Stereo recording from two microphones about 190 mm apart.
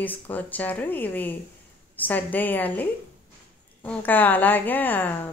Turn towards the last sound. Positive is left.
turn(degrees=10)  # may be behind; listen again after turning